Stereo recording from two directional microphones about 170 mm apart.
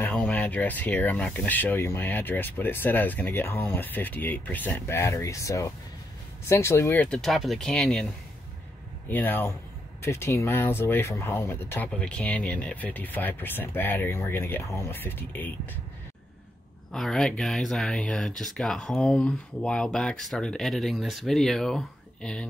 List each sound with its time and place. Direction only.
0.0 s speech: 10° left (ahead or behind)
7.1 s speech: centre (ahead or behind)
9.1 s speech: 10° left (ahead or behind)
16.9 s speech: centre (ahead or behind)